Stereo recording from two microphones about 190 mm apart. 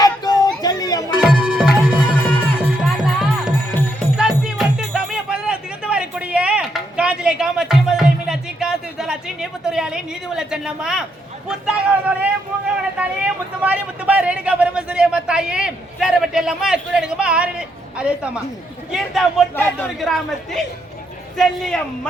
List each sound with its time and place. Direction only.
0.0 s a sound: 20° left (ahead or behind)
1.2 s music: 5° right (ahead or behind)
11.4 s speech: 5° right (ahead or behind)